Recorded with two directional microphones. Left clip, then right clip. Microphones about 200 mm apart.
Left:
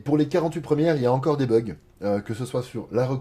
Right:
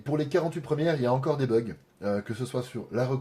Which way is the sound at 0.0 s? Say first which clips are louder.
Left 5 dB; 35° left (ahead or behind).